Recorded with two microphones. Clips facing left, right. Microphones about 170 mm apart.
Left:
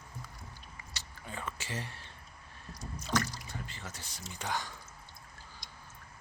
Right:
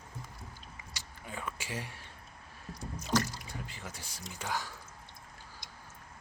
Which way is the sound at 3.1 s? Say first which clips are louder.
Right 2 dB; 10° right (ahead or behind).